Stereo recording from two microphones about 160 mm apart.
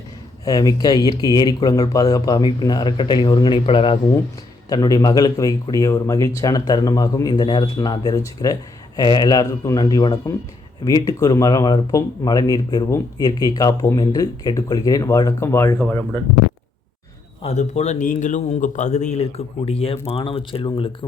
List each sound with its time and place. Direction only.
0.4 s speech: 25° left (ahead or behind)
17.4 s a man's voice: 45° left (ahead or behind)